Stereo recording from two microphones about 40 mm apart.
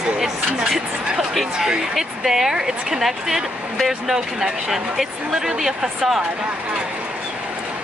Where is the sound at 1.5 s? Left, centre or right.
Centre.